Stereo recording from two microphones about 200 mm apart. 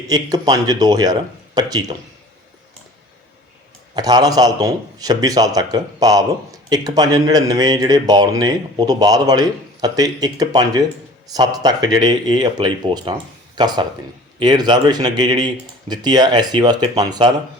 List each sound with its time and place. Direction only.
0.1 s a man's voice: 20° right (ahead or behind)
3.9 s a man's voice: 20° right (ahead or behind)